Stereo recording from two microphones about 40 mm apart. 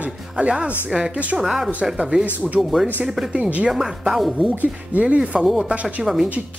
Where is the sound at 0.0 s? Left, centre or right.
Right.